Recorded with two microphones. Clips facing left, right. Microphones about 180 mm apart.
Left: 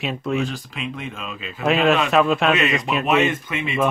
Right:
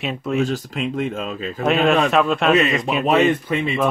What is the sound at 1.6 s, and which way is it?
Speech, centre (ahead or behind).